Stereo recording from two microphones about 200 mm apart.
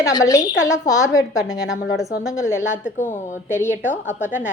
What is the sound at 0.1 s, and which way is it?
Speech, 15° left (ahead or behind).